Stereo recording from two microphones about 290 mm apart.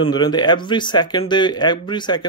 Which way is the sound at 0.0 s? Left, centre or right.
Centre.